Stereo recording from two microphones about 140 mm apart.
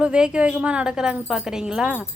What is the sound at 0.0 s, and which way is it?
A woman's voice, 5° right (ahead or behind).